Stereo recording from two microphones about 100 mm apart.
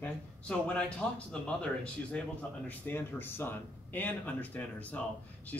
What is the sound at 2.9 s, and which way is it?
Speech, 20° left (ahead or behind).